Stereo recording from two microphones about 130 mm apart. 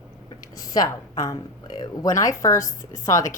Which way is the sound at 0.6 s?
30° left (ahead or behind).